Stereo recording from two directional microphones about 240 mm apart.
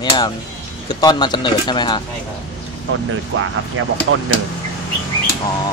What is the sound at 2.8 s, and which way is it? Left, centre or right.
Speech, right.